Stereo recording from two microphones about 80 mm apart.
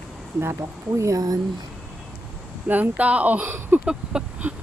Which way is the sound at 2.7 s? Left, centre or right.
Centre.